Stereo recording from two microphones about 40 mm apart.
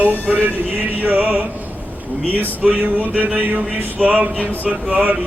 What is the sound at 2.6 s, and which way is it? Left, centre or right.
Mantra, right.